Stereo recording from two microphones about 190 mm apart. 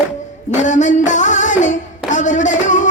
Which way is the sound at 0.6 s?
40° left (ahead or behind).